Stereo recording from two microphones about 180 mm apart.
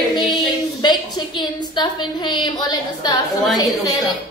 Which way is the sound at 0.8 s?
25° left (ahead or behind).